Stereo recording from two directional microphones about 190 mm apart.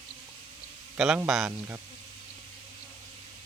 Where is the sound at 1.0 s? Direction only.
Centre (ahead or behind).